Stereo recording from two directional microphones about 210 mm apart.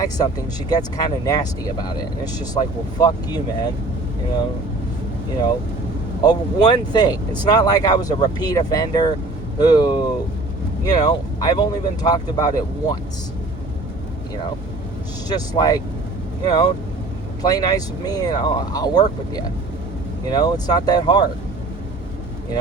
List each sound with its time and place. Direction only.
0.0 s speech: 20° left (ahead or behind)
6.2 s speech: 20° left (ahead or behind)
15.3 s speech: 20° left (ahead or behind)
17.4 s speech: 20° left (ahead or behind)